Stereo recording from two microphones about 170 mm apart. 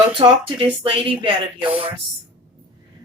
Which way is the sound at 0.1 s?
30° right (ahead or behind).